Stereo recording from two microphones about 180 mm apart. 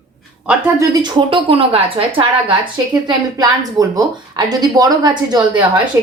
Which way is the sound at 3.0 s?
20° right (ahead or behind).